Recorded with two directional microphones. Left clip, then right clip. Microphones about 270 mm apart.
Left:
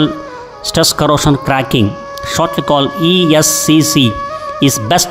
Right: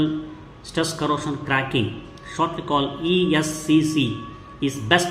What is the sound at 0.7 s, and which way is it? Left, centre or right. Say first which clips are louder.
A man's voice: left 12 dB; left.